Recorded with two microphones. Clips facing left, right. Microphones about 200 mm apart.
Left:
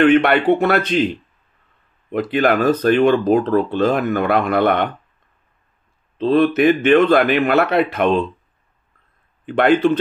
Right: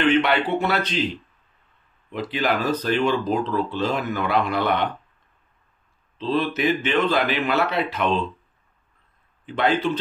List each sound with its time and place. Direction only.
0.0 s speech: 55° left (ahead or behind)
6.1 s speech: 55° left (ahead or behind)
9.5 s speech: 55° left (ahead or behind)